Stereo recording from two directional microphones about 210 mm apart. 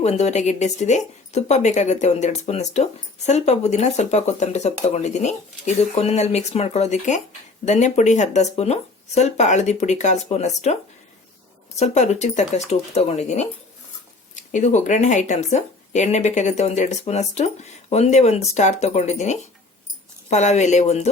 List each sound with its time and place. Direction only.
0.0 s a woman's voice: 30° left (ahead or behind)
11.8 s a woman's voice: 35° left (ahead or behind)
14.5 s a woman's voice: 35° left (ahead or behind)